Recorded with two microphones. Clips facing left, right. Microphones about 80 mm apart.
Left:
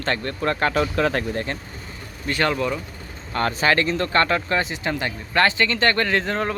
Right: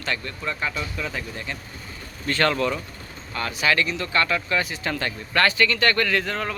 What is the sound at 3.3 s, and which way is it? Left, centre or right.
Speech, left.